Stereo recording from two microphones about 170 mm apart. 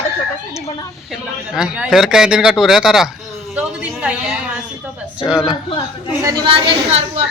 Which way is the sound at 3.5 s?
5° right (ahead or behind).